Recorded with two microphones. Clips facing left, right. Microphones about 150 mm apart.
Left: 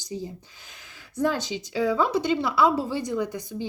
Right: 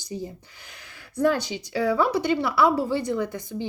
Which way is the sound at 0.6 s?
20° left (ahead or behind).